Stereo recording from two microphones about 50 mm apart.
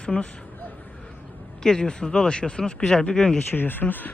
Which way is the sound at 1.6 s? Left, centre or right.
Centre.